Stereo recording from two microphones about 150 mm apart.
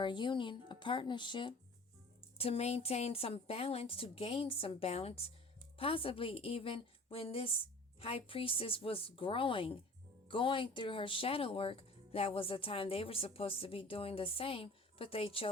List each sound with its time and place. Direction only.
0.0 s speech: 30° left (ahead or behind)
2.4 s speech: 45° left (ahead or behind)